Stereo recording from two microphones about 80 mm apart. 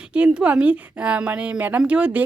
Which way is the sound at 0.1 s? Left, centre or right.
Centre.